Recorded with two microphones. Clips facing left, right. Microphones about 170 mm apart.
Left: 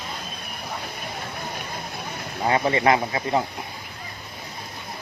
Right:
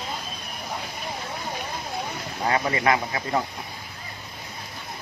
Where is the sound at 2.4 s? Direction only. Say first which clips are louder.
Left 3 dB; 25° left (ahead or behind).